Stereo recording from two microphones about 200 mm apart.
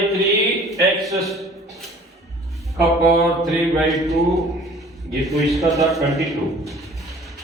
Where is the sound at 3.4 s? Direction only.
Centre (ahead or behind).